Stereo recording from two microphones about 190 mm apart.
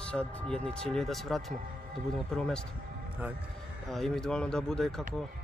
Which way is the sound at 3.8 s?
Centre (ahead or behind).